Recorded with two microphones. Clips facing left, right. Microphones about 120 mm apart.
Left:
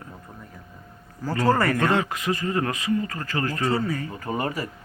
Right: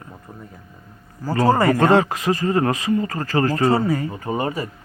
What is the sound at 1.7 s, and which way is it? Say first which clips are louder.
Speech: right 7 dB; 30° right (ahead or behind).